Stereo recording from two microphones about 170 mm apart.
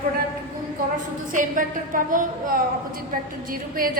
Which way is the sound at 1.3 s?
50° right (ahead or behind).